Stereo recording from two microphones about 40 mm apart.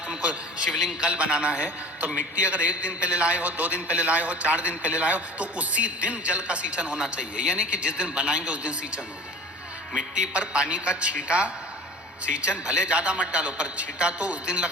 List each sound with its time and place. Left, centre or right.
0.8 s a man's voice: centre
1.1 s a man's voice: right
10.3 s a man's voice: right